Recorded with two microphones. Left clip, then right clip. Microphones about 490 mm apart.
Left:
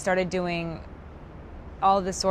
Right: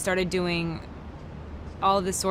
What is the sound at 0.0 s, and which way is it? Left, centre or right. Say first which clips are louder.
Speech: left 1 dB; left.